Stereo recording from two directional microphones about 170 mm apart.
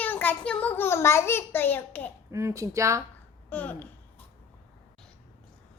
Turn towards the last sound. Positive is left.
turn(degrees=10)  # may be behind; listen again after turning